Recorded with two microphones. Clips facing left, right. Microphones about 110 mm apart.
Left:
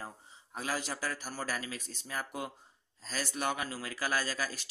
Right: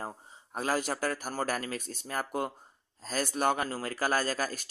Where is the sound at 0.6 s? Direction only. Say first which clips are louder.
Right 6 dB; 50° right (ahead or behind).